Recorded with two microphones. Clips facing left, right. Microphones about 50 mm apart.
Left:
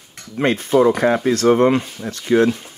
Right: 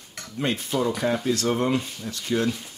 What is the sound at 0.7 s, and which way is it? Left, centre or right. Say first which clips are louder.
Speech: left 11 dB; left.